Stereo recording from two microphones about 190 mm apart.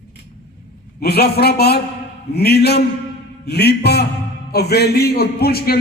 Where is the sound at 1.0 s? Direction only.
60° left (ahead or behind).